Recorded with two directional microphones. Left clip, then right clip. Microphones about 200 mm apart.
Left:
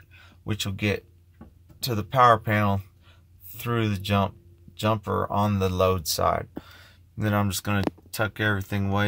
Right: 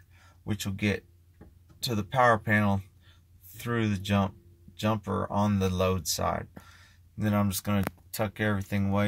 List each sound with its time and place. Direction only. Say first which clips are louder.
0.4 s speech: left 4 dB; 10° left (ahead or behind)